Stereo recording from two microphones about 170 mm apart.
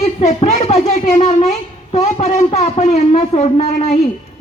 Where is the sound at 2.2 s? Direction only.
50° left (ahead or behind).